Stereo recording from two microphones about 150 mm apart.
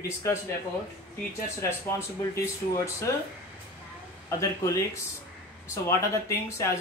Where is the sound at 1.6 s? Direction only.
20° left (ahead or behind).